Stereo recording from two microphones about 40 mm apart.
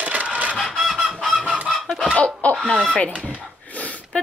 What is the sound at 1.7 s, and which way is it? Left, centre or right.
Chicken, centre.